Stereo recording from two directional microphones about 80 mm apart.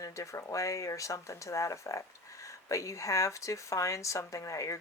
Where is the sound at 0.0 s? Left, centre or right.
Left.